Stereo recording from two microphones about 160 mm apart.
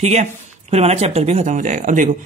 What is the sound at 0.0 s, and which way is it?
Speech, 45° right (ahead or behind).